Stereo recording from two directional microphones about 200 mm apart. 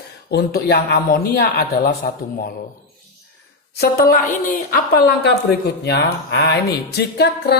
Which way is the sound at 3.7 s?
50° left (ahead or behind).